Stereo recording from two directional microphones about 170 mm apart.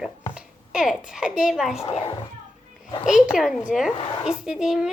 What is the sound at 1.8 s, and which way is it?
Speech, 30° left (ahead or behind).